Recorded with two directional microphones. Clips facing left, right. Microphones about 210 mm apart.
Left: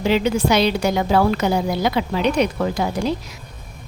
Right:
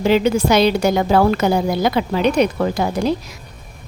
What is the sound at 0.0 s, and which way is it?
A woman's voice, 45° right (ahead or behind).